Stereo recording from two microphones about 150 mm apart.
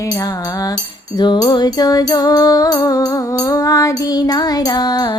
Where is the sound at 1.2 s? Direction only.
30° left (ahead or behind).